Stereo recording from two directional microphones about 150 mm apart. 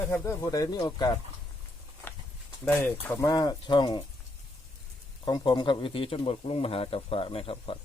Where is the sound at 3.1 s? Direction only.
20° left (ahead or behind).